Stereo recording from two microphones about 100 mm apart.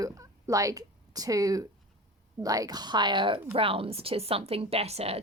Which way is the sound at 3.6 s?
65° right (ahead or behind).